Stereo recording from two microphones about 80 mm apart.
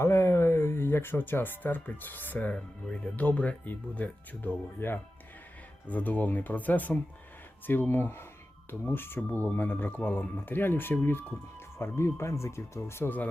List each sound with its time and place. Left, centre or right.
0.0 s speech: left